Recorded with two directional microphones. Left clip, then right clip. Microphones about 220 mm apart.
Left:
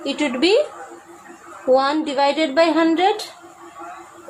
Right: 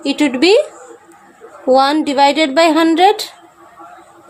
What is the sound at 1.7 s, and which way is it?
Speech, 50° right (ahead or behind).